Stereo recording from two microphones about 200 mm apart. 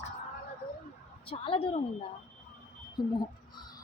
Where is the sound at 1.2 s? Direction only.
25° left (ahead or behind).